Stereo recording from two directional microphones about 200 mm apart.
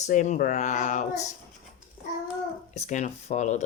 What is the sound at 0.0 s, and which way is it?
Speech, 35° left (ahead or behind).